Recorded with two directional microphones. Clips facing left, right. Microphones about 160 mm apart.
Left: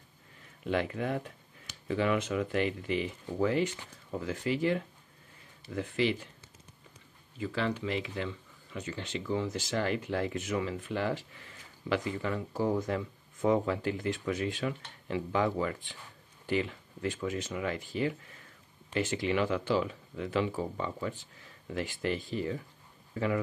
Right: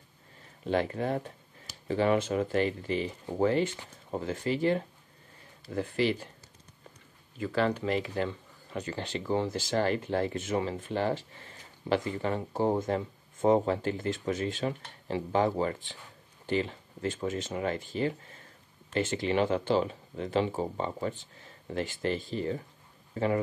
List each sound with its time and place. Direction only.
0.7 s speech: 35° right (ahead or behind)
7.3 s speech: 45° right (ahead or behind)
13.9 s speech: 25° right (ahead or behind)
14.2 s speech: 35° right (ahead or behind)
21.4 s a sound: 35° right (ahead or behind)
22.3 s speech: 35° right (ahead or behind)